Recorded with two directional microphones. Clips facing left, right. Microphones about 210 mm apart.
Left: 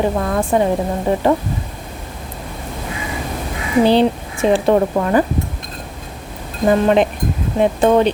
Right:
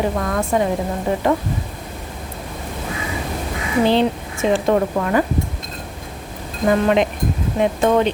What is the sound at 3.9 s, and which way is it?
Speech, 35° left (ahead or behind).